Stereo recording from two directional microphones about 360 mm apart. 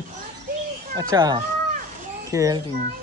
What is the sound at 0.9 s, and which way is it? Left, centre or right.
Speech, centre.